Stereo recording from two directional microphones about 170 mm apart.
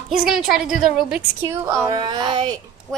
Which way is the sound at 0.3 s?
5° right (ahead or behind).